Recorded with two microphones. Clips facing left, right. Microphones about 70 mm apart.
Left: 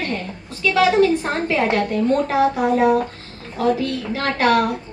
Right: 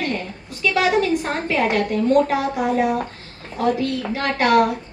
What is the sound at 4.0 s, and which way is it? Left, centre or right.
Speech, right.